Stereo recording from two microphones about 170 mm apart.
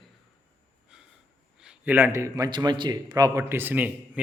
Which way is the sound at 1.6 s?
5° right (ahead or behind).